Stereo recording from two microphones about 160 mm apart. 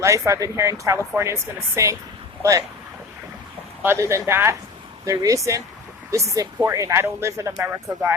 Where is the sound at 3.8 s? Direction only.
20° right (ahead or behind).